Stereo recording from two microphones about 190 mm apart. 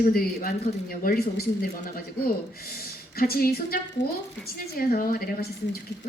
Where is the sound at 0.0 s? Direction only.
50° left (ahead or behind).